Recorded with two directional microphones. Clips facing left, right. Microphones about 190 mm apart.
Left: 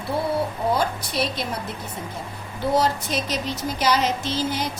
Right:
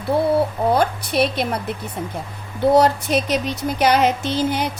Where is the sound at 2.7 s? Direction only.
60° right (ahead or behind).